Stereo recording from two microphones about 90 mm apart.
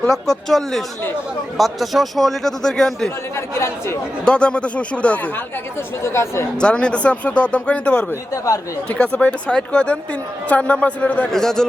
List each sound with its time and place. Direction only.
0.0 s a man's voice: 5° left (ahead or behind)
3.3 s speech: 30° left (ahead or behind)
4.3 s speech: 10° left (ahead or behind)
6.0 s speech: 30° left (ahead or behind)
6.6 s speech: 10° left (ahead or behind)
8.3 s speech: 40° left (ahead or behind)
8.9 s speech: 15° left (ahead or behind)